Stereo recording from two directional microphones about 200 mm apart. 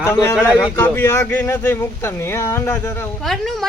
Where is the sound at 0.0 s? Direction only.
10° left (ahead or behind).